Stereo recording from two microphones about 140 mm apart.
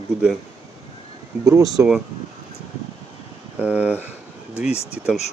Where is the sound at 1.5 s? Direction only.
25° right (ahead or behind).